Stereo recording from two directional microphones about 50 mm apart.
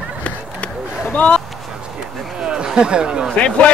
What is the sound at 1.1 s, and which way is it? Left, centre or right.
Speech, left.